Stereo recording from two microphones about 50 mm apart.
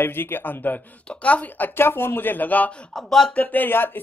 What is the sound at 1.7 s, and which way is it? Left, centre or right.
Speech, left.